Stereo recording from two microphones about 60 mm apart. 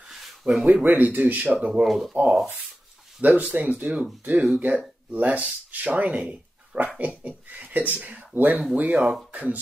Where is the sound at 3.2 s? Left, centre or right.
Right.